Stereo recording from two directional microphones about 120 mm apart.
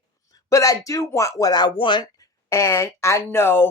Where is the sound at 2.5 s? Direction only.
25° left (ahead or behind).